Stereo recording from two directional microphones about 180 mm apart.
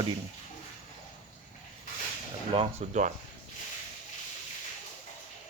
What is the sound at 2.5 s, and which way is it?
Speech, 35° right (ahead or behind).